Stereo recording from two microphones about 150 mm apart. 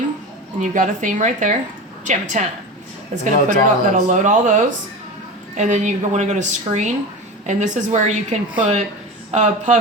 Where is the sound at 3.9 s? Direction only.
55° right (ahead or behind).